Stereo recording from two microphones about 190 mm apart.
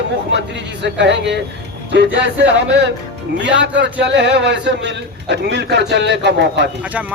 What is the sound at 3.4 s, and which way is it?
A man's voice, 65° right (ahead or behind).